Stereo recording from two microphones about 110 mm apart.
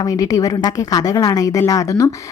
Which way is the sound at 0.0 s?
30° left (ahead or behind).